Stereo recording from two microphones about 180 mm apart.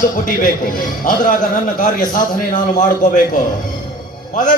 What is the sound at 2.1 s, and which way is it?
A man's voice, 45° left (ahead or behind).